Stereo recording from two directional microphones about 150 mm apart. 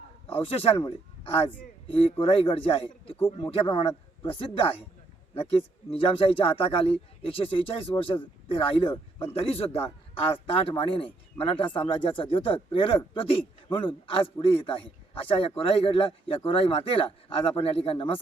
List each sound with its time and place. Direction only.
0.3 s a man's voice: 40° left (ahead or behind)